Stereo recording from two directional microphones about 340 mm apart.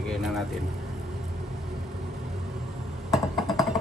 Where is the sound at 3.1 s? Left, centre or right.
Centre.